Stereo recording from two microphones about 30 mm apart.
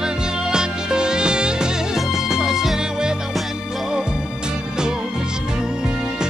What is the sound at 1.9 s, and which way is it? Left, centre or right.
Music, centre.